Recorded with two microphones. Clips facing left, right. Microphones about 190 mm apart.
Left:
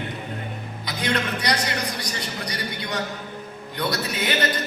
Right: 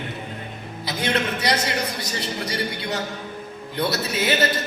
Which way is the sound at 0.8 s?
25° right (ahead or behind).